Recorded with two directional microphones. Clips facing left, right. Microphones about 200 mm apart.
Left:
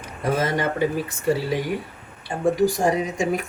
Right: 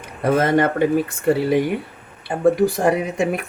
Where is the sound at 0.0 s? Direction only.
60° right (ahead or behind).